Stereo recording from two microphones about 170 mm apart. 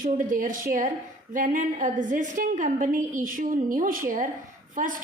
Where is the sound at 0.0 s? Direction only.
50° right (ahead or behind).